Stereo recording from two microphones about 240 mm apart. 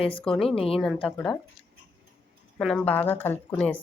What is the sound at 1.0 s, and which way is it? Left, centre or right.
Speech, centre.